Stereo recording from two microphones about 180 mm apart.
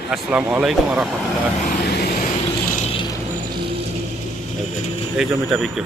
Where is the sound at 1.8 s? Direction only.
60° left (ahead or behind).